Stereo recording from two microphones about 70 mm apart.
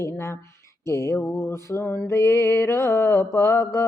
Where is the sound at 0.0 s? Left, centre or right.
Left.